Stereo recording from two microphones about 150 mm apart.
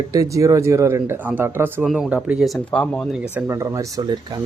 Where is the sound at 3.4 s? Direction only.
15° right (ahead or behind).